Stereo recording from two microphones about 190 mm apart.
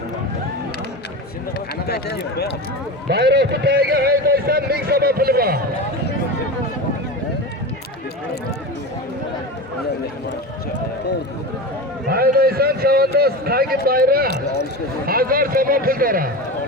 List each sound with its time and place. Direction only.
1.9 s speech: 55° left (ahead or behind)
3.1 s a man's voice: 60° right (ahead or behind)
12.0 s a man's voice: 55° right (ahead or behind)